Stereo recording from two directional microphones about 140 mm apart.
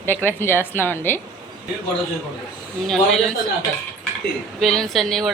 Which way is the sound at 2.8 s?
Centre (ahead or behind).